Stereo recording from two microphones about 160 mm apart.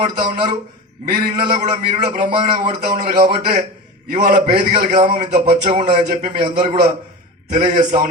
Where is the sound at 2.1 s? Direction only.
55° right (ahead or behind).